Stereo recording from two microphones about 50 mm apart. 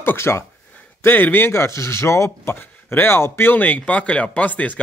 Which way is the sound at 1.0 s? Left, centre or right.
Left.